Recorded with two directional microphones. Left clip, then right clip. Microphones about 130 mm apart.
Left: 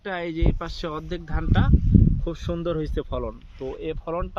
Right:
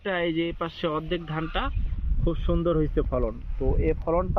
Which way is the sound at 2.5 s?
25° right (ahead or behind).